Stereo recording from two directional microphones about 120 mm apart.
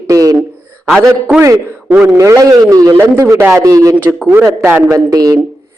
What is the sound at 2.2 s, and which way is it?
A man's voice, 25° right (ahead or behind).